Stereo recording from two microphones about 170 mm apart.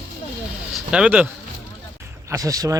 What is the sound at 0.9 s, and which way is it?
Speech, 5° right (ahead or behind).